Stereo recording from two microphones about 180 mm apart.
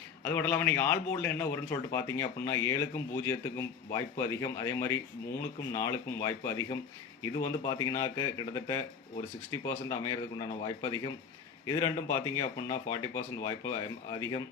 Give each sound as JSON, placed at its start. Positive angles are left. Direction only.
{"t": 0.3, "sound": "speech", "side_deg": 10}